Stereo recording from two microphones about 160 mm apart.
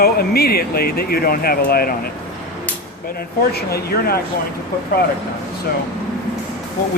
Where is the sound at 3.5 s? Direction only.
80° left.